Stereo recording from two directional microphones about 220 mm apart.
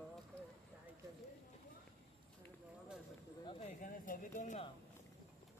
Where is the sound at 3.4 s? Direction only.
30° left (ahead or behind).